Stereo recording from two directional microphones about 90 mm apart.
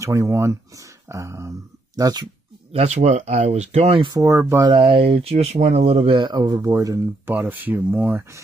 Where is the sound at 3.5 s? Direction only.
80° right.